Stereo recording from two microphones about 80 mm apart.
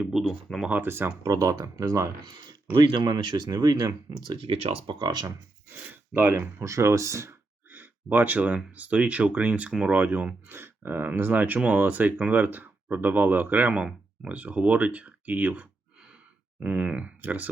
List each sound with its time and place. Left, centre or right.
0.0 s speech: centre
0.7 s speech: right
1.2 s speech: right
2.7 s speech: right
4.9 s speech: right
5.9 s speech: right
6.7 s speech: right
7.7 s speech: right